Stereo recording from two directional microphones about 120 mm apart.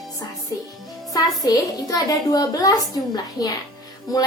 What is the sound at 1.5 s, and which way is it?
A woman's voice, 30° left (ahead or behind).